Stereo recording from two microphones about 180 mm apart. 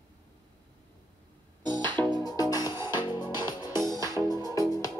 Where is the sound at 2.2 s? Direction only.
20° left (ahead or behind).